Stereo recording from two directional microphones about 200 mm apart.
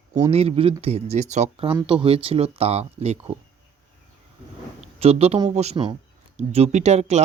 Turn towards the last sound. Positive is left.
turn(degrees=-35)  # may be behind; listen again after turning